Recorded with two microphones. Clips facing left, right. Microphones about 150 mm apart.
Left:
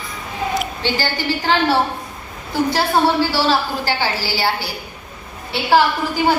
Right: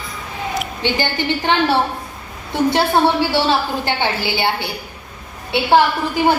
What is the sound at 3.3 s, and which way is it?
A woman's voice, 20° right (ahead or behind).